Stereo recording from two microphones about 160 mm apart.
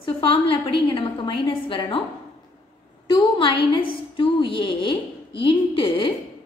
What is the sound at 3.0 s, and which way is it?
A woman's voice, 30° left (ahead or behind).